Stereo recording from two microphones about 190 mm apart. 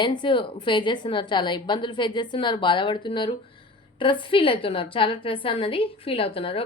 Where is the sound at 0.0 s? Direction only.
25° left (ahead or behind).